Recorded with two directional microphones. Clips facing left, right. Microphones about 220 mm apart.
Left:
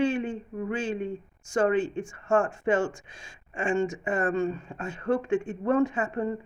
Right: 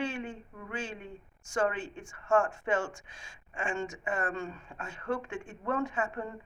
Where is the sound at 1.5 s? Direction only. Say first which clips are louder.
Left 7 dB; 25° left (ahead or behind).